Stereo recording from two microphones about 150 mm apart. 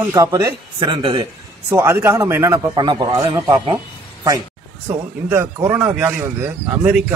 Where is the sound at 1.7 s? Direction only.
20° right (ahead or behind).